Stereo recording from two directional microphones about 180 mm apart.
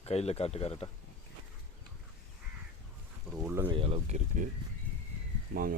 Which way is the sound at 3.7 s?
30° right (ahead or behind).